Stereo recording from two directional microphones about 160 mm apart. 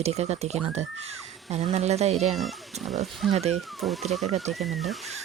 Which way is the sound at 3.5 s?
Centre (ahead or behind).